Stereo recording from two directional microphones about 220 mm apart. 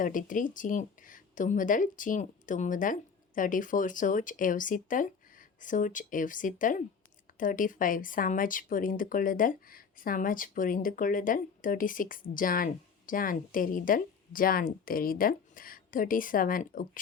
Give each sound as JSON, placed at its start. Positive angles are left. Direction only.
{"t": 0.0, "sound": "speech", "side_deg": 35}